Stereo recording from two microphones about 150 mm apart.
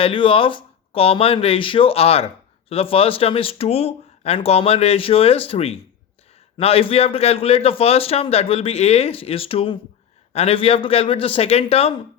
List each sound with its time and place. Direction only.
0.0 s speech: 35° left (ahead or behind)